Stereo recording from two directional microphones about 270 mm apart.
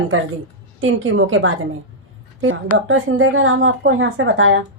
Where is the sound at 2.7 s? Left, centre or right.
Right.